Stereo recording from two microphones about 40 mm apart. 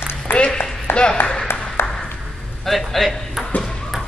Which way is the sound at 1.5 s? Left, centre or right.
Left.